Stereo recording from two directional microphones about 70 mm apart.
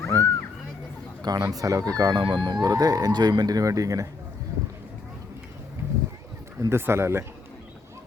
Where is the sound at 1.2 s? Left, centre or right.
Right.